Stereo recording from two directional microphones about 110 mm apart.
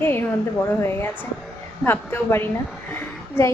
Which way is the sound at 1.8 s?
20° left (ahead or behind).